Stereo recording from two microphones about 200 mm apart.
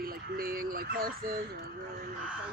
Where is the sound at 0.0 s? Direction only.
45° right (ahead or behind).